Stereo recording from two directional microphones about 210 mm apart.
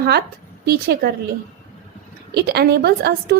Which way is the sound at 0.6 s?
45° right (ahead or behind).